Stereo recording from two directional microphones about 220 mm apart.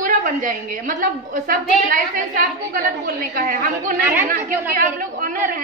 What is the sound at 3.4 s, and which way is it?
A woman's voice, 40° right (ahead or behind).